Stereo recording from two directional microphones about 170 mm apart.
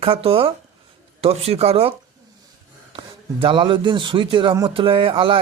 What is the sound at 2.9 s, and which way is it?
A man's voice, 30° right (ahead or behind).